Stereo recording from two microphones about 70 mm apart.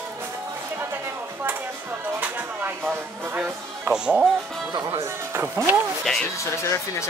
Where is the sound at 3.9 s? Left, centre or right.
Centre.